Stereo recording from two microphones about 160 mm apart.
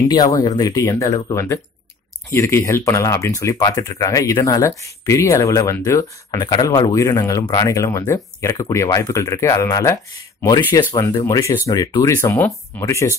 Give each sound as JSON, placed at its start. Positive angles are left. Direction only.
{"t": 0.1, "sound": "speech", "side_deg": 25}